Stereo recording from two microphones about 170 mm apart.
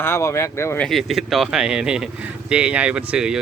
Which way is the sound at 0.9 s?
Centre (ahead or behind).